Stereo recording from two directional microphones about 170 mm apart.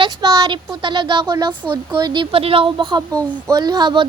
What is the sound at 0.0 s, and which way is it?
Speech, 25° right (ahead or behind).